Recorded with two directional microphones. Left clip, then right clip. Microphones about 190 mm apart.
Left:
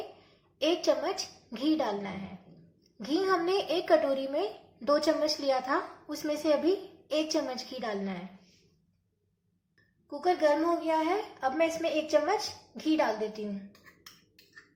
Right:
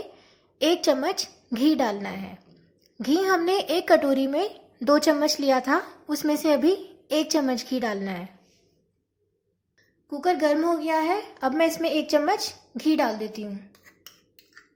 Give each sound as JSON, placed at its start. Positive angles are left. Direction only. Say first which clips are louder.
{"t": 0.2, "sound": "a woman's voice", "louder": "right 7 dB", "side_deg": -50}
{"t": 10.1, "sound": "a woman's voice", "louder": "right 4 dB", "side_deg": -50}